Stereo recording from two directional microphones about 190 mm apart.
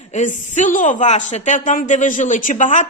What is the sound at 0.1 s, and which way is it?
A woman's voice, 40° left (ahead or behind).